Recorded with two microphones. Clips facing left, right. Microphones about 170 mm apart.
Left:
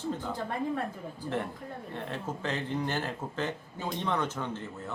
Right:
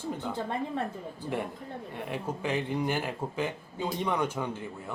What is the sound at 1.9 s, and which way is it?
Speech, 10° right (ahead or behind).